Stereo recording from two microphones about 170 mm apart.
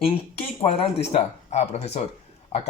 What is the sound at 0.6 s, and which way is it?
Speech, 35° left (ahead or behind).